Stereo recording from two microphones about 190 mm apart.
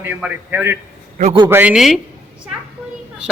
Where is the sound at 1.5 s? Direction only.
10° right (ahead or behind).